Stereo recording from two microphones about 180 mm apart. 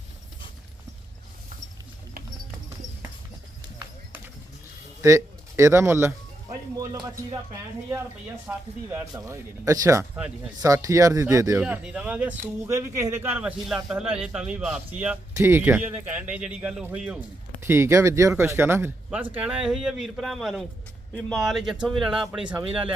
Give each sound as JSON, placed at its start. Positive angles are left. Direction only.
{"t": 5.0, "sound": "music", "side_deg": -15}
{"t": 8.4, "sound": "speech", "side_deg": -15}
{"t": 11.6, "sound": "speech", "side_deg": -5}